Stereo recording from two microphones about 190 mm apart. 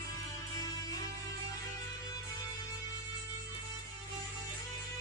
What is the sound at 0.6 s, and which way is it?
Music, 20° left (ahead or behind).